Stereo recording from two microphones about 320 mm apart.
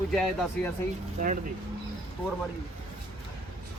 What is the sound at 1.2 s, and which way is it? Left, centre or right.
Speech, right.